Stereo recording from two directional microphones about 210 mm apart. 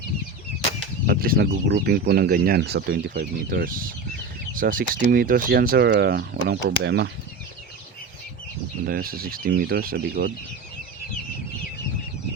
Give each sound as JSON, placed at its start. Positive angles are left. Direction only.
{"t": 1.0, "sound": "speech", "side_deg": -45}
{"t": 8.9, "sound": "speech", "side_deg": -45}